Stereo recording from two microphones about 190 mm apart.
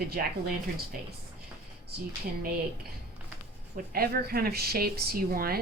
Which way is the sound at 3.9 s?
55° right (ahead or behind).